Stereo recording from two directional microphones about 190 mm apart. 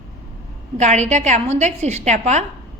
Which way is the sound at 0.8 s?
40° right (ahead or behind).